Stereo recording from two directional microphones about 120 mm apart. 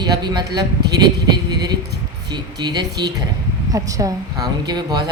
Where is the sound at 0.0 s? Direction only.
35° right (ahead or behind).